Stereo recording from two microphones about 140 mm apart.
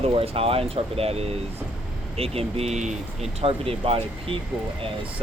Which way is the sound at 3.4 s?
45° right (ahead or behind).